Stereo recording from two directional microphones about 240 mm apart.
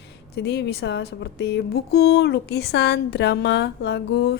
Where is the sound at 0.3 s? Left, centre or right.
Left.